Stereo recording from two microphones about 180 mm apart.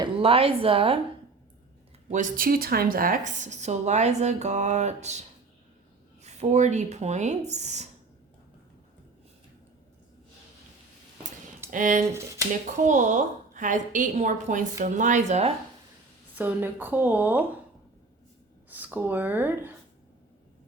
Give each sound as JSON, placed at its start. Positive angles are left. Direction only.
{"t": 0.0, "sound": "a woman's voice", "side_deg": -30}
{"t": 2.0, "sound": "a woman's voice", "side_deg": -45}
{"t": 6.2, "sound": "a woman's voice", "side_deg": -40}
{"t": 11.7, "sound": "a woman's voice", "side_deg": -45}
{"t": 16.3, "sound": "a woman's voice", "side_deg": -10}
{"t": 18.7, "sound": "a woman's voice", "side_deg": -10}